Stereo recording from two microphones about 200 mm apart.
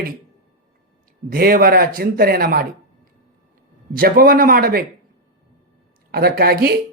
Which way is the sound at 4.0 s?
45° right (ahead or behind).